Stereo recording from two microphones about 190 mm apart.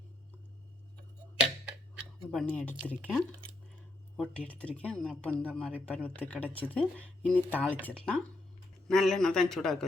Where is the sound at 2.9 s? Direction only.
Centre (ahead or behind).